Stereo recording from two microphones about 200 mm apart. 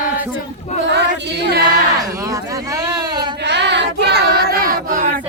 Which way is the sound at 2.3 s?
15° right (ahead or behind).